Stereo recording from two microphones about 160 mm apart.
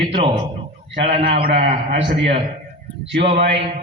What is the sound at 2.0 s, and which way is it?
Speech, 90° right.